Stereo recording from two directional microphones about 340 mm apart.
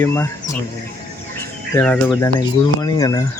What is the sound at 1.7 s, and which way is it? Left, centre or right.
Speech, centre.